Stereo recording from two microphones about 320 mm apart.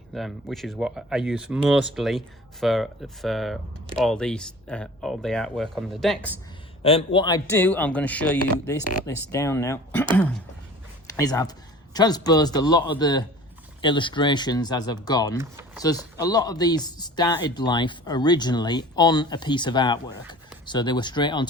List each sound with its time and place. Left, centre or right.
0.1 s speech: centre
6.8 s speech: centre
11.2 s speech: centre
15.4 s speech: centre
16.1 s speech: centre